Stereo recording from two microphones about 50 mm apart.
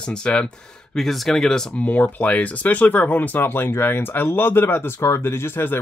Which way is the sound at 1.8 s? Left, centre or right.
Left.